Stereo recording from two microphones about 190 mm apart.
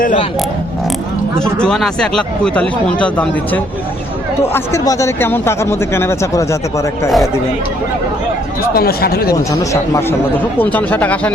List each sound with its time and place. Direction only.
1.4 s speech: 5° left (ahead or behind)
8.7 s speech: 55° left (ahead or behind)
9.3 s speech: 15° left (ahead or behind)